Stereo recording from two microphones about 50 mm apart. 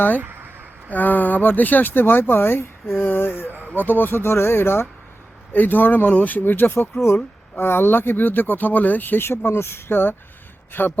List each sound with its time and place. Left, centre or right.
0.9 s speech: left
5.5 s speech: left
9.9 s speech: left